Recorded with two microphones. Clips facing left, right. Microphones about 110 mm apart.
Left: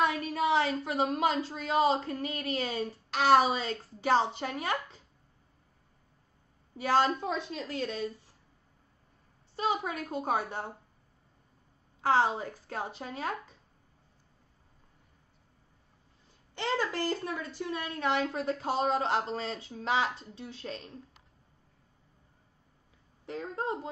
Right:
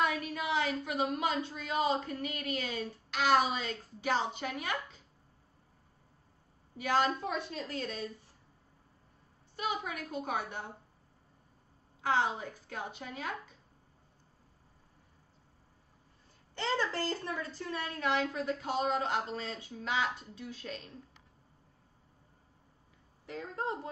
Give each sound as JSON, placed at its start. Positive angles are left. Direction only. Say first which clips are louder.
{"t": 0.0, "sound": "a sound", "louder": "left 4 dB", "side_deg": 30}
{"t": 1.8, "sound": "a woman's voice", "louder": "left 4 dB", "side_deg": 35}
{"t": 6.8, "sound": "a woman's voice", "louder": "left 3 dB", "side_deg": 30}
{"t": 9.6, "sound": "a woman's voice", "louder": "left 5 dB", "side_deg": 30}
{"t": 12.0, "sound": "a woman's voice", "louder": "left 4 dB", "side_deg": 35}
{"t": 16.5, "sound": "a woman's voice", "louder": "left 2 dB", "side_deg": 15}
{"t": 18.0, "sound": "a woman's voice", "louder": "left 2 dB", "side_deg": 30}
{"t": 23.2, "sound": "a woman's voice", "louder": "left 3 dB", "side_deg": 25}